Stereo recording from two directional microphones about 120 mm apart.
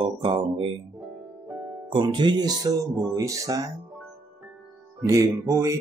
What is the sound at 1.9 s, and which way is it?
Speech, 40° right (ahead or behind).